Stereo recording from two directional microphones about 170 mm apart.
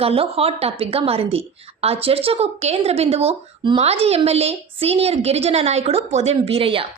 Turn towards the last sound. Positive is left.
turn(degrees=-35)  # may be behind; listen again after turning